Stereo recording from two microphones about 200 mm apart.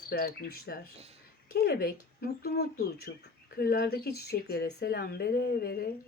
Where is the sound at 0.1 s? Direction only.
50° left (ahead or behind).